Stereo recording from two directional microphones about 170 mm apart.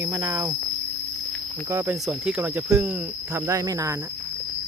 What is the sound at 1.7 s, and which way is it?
Speech, 15° right (ahead or behind).